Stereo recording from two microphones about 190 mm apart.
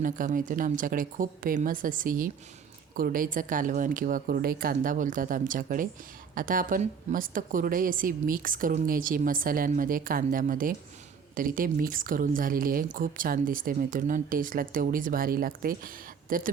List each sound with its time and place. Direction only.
0.0 s speech: 45° right (ahead or behind)